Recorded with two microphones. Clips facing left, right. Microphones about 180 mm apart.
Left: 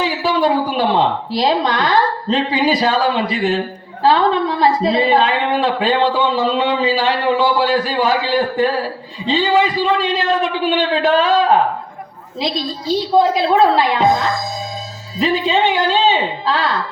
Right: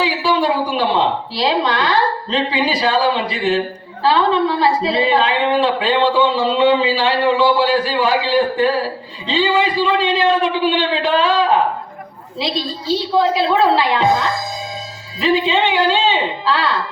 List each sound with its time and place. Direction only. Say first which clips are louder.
0.0 s a woman's voice: left 1 dB; 45° left (ahead or behind)
13.3 s a woman's voice: left 1 dB; 45° left (ahead or behind)